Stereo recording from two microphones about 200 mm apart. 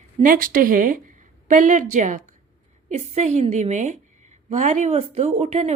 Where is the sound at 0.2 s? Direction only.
45° right (ahead or behind).